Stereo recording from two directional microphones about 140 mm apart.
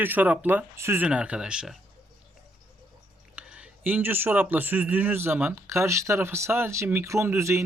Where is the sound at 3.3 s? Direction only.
10° right (ahead or behind).